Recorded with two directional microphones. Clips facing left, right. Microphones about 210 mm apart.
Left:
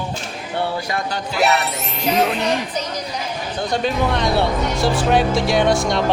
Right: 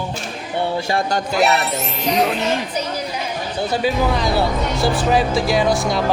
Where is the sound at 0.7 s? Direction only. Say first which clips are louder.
Right 4 dB; 25° right (ahead or behind).